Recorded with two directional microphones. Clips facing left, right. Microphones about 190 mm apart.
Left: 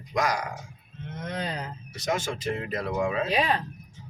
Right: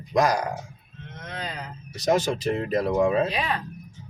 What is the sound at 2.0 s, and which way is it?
Speech, 35° right (ahead or behind).